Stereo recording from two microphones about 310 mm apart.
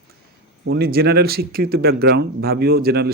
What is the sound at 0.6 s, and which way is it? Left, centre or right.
A man's voice, right.